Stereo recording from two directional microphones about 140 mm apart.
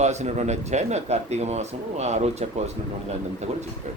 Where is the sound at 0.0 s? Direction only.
55° right (ahead or behind).